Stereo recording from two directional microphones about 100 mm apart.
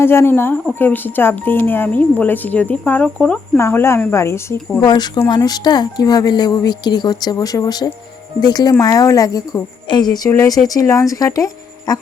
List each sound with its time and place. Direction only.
0.0 s a woman's voice: 25° left (ahead or behind); by 3.6 s 10° left (ahead or behind)
3.6 s a woman's voice: 25° left (ahead or behind)
4.8 s a woman's voice: 45° left (ahead or behind)
10.2 s a woman's voice: 30° left (ahead or behind)